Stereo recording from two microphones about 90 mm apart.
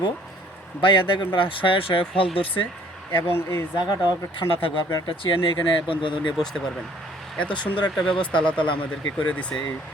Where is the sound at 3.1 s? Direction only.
25° left (ahead or behind).